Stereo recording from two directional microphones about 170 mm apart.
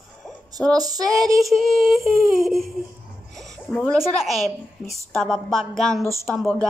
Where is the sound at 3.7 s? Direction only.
Centre (ahead or behind).